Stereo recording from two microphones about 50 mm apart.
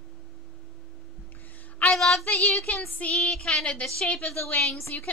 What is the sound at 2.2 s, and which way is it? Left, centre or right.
Speech, left.